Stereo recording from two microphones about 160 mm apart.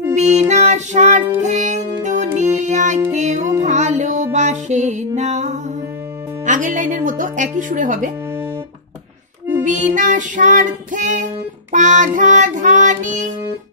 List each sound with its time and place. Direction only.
0.1 s music: 45° right (ahead or behind)
9.7 s music: 50° right (ahead or behind)